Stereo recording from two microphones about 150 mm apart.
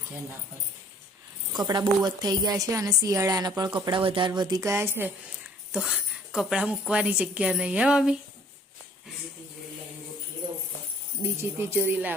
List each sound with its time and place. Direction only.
1.5 s speech: 25° right (ahead or behind)
4.3 s speech: 25° right (ahead or behind)
5.7 s a woman's voice: 5° right (ahead or behind)
11.2 s speech: 15° right (ahead or behind)